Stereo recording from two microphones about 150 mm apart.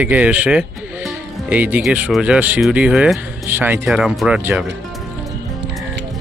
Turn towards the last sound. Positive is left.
turn(degrees=-5)  # may be behind; listen again after turning